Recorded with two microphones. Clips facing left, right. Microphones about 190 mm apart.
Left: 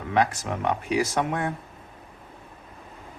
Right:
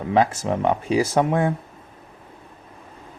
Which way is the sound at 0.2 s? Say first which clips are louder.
Right 4 dB; 25° right (ahead or behind).